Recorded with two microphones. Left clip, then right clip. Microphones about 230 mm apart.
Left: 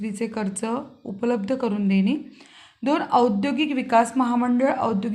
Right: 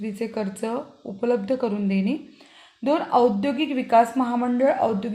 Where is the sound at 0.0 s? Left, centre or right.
Centre.